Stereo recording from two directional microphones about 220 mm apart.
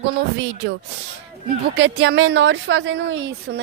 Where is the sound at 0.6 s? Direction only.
55° right (ahead or behind).